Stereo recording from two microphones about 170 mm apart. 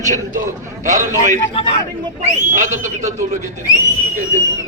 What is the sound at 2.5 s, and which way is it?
Speech, 45° right (ahead or behind).